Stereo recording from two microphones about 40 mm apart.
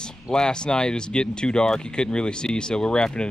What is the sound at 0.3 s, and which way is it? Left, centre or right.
Speech, centre.